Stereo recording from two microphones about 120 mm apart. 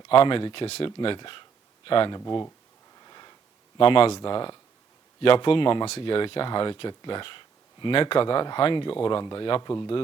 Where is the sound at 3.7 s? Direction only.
50° left (ahead or behind).